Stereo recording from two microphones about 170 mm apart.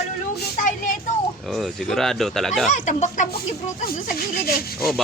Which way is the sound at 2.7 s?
45° left (ahead or behind).